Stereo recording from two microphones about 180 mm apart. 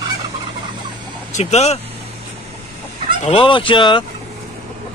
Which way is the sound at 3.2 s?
30° left (ahead or behind).